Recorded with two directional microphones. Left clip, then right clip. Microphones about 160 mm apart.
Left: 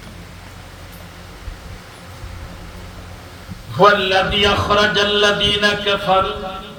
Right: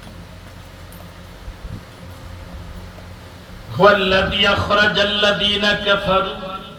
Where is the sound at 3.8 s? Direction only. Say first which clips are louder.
Even; 65° left (ahead or behind).